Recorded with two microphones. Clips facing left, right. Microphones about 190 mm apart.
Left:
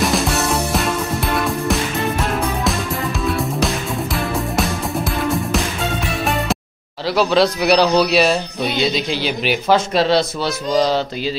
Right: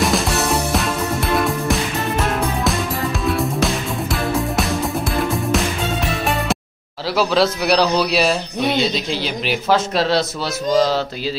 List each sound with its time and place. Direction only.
0.0 s music: centre (ahead or behind)
3.3 s music: centre (ahead or behind)
7.2 s speech: 5° right (ahead or behind)